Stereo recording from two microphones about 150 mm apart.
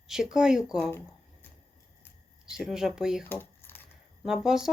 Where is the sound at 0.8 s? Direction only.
15° left (ahead or behind).